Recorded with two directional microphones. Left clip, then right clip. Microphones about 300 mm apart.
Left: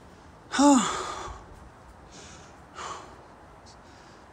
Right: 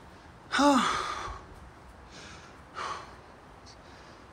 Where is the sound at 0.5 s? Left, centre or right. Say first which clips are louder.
Left 2 dB; centre.